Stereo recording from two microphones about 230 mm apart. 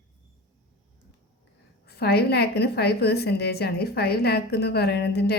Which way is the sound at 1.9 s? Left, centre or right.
Left.